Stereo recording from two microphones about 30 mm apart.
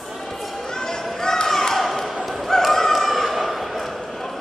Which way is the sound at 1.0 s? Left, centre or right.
Centre.